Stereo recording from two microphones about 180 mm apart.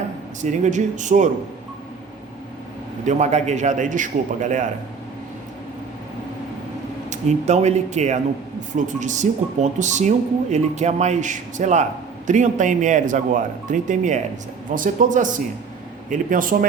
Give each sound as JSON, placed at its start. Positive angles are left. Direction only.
{"t": 0.4, "sound": "speech", "side_deg": -40}
{"t": 3.1, "sound": "speech", "side_deg": -40}
{"t": 7.1, "sound": "speech", "side_deg": -40}